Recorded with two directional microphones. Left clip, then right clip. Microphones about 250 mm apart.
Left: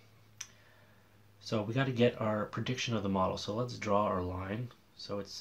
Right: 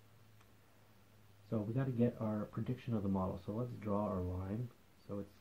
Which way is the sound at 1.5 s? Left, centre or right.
Centre.